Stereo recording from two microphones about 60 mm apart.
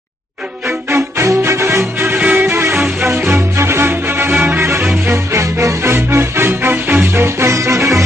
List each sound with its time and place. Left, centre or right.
0.8 s music: right
2.0 s music: right
5.0 s music: right
7.2 s music: right